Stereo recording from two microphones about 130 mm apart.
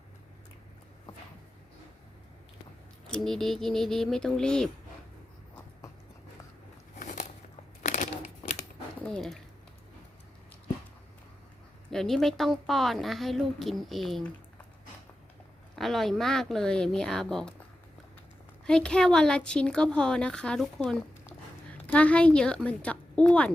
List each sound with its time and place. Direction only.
3.1 s a woman's voice: 5° left (ahead or behind)
7.0 s biting: 75° left (ahead or behind)
7.8 s a sound: 75° left (ahead or behind)
9.0 s a sound: 5° left (ahead or behind)
11.9 s a woman's voice: 5° left (ahead or behind)
15.7 s a woman's voice: centre (ahead or behind)
18.6 s speech: 5° left (ahead or behind)